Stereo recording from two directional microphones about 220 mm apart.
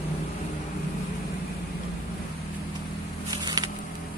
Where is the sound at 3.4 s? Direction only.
15° right (ahead or behind).